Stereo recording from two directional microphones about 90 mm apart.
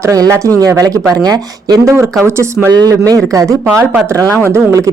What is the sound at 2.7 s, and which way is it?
Speech, 45° right (ahead or behind).